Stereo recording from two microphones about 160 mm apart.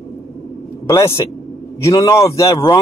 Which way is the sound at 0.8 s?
20° left (ahead or behind).